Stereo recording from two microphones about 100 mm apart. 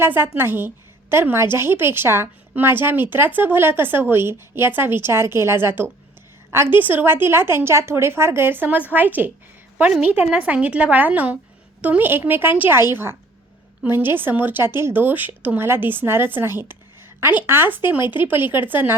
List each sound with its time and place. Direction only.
0.0 s a woman's voice: 20° right (ahead or behind)